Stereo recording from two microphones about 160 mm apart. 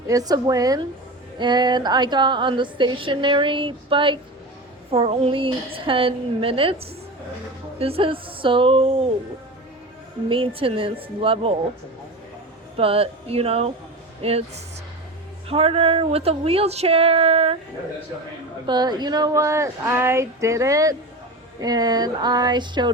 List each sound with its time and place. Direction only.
0.1 s a woman's voice: 25° right (ahead or behind)
10.2 s a woman's voice: 35° right (ahead or behind)
12.7 s a woman's voice: 35° right (ahead or behind)
18.6 s speech: 25° right (ahead or behind)